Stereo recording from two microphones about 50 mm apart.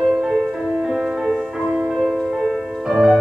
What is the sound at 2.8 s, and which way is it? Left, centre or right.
Music, centre.